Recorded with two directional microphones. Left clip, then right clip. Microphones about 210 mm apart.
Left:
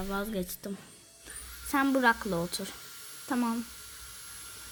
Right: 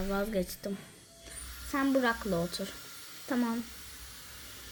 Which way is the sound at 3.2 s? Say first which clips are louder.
Left 1 dB; 10° left (ahead or behind).